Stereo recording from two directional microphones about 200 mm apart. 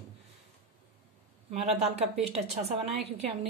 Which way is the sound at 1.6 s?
30° right (ahead or behind).